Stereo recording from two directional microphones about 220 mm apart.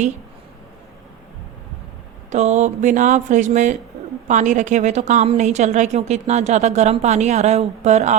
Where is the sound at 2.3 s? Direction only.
30° right (ahead or behind).